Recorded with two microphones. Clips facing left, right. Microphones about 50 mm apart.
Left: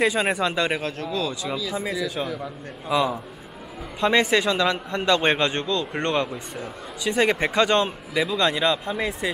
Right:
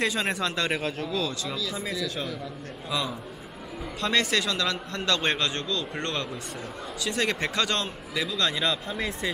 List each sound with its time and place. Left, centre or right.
0.0 s a man's voice: centre
0.7 s speech: centre
1.4 s a man's voice: centre